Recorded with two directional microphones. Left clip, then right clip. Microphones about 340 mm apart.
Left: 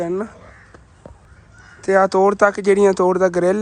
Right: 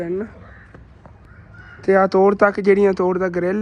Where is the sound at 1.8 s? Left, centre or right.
Centre.